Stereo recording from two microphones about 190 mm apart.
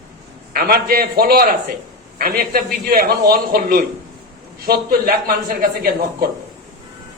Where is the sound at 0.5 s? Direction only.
50° right (ahead or behind).